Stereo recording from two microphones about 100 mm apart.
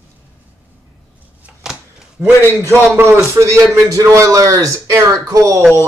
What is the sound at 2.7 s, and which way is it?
A man's voice, 25° right (ahead or behind).